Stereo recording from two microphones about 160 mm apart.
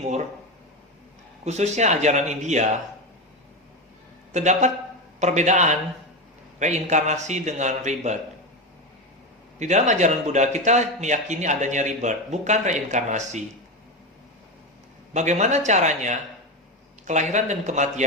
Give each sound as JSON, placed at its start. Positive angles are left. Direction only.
{"t": 1.5, "sound": "a man's voice", "side_deg": -45}
{"t": 4.3, "sound": "a man's voice", "side_deg": -50}
{"t": 9.6, "sound": "a man's voice", "side_deg": -45}
{"t": 15.1, "sound": "a man's voice", "side_deg": -45}